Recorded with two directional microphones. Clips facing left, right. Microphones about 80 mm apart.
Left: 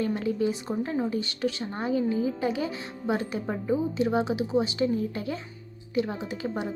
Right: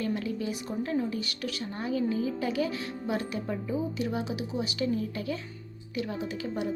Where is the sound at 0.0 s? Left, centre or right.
Left.